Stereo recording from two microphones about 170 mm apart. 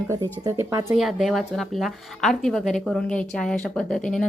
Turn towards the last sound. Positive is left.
turn(degrees=5)  # may be behind; listen again after turning